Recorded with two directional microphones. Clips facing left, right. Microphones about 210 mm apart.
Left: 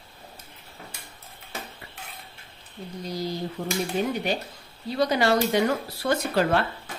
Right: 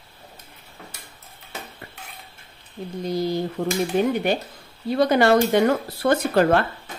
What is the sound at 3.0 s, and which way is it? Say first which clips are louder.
A woman's voice: right 7 dB; 55° right (ahead or behind).